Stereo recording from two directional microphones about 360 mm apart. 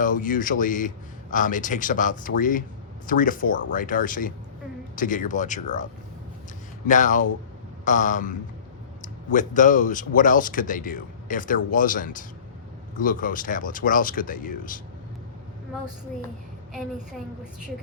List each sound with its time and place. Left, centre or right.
0.0 s speech: left